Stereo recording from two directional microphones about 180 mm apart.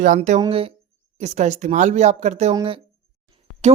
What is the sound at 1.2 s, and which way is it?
Speech, 40° right (ahead or behind).